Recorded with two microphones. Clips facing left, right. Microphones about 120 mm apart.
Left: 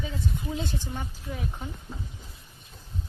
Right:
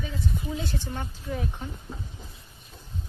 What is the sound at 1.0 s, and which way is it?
Speech, centre (ahead or behind).